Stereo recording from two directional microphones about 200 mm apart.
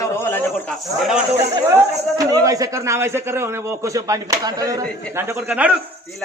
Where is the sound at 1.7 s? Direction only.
15° right (ahead or behind).